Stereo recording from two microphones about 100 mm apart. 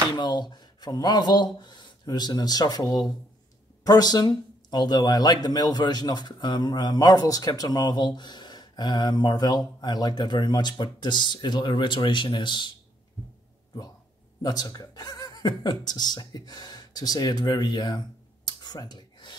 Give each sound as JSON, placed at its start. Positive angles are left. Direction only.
{"t": 0.1, "sound": "speech", "side_deg": 45}
{"t": 14.4, "sound": "speech", "side_deg": 40}